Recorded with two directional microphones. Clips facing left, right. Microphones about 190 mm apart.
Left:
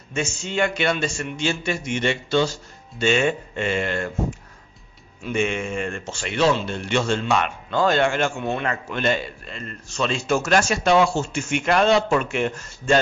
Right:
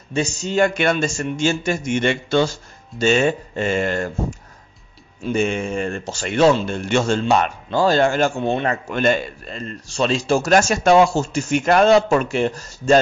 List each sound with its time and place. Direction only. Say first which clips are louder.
0.1 s speech: right 5 dB; 35° right (ahead or behind)
3.0 s a man's voice: right 3 dB; 40° right (ahead or behind)
8.9 s a man's voice: right 5 dB; 45° right (ahead or behind)